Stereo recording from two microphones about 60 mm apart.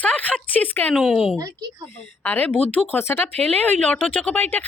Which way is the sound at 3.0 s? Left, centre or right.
Left.